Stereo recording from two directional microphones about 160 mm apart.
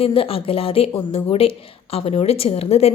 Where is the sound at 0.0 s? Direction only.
35° left (ahead or behind).